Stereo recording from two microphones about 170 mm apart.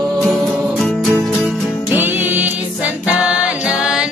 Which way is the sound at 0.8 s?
Centre (ahead or behind).